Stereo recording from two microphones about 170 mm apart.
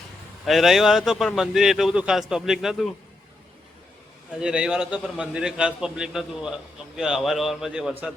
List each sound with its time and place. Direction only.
0.4 s a man's voice: centre (ahead or behind)
4.4 s a man's voice: 5° right (ahead or behind)